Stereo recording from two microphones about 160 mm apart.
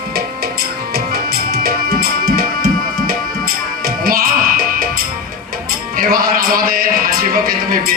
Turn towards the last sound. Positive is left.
turn(degrees=-65)  # may be behind; listen again after turning